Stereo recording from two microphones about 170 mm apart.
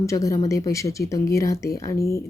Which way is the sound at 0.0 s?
20° left (ahead or behind).